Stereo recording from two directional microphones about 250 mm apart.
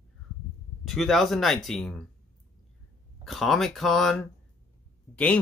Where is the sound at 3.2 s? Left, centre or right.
Centre.